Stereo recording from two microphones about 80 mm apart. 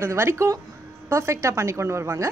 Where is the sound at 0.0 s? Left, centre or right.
Right.